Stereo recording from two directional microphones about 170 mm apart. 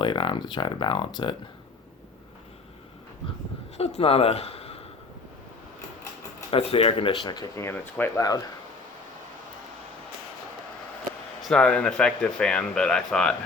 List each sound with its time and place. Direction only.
0.0 s speech: 30° left (ahead or behind)
3.8 s speech: 35° left (ahead or behind)
6.5 s speech: 35° left (ahead or behind); by 8.4 s 15° left (ahead or behind)
11.4 s speech: 5° left (ahead or behind)